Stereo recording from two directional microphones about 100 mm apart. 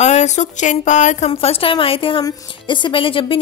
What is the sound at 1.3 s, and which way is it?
Speech, 70° left (ahead or behind).